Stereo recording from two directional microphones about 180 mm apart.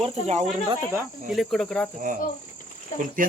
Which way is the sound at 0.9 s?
Centre (ahead or behind).